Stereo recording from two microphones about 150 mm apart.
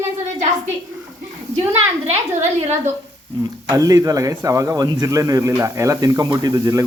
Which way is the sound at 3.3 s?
30° right (ahead or behind).